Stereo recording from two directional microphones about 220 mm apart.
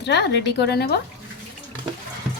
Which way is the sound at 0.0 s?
50° left (ahead or behind).